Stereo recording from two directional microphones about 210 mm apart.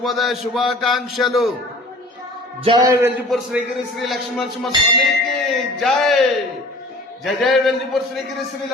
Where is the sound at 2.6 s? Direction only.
20° right (ahead or behind).